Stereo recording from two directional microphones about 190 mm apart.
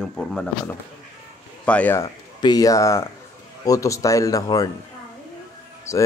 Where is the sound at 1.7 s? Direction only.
10° left (ahead or behind).